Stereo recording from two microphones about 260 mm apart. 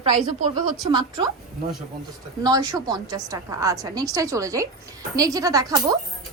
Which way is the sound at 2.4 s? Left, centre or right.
Centre.